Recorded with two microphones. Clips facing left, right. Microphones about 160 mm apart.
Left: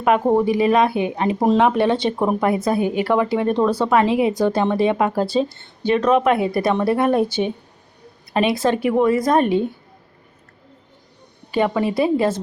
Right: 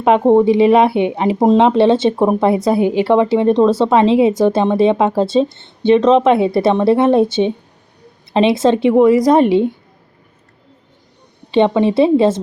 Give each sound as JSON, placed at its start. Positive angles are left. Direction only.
{"t": 0.0, "sound": "speech", "side_deg": -25}
{"t": 11.5, "sound": "speech", "side_deg": -25}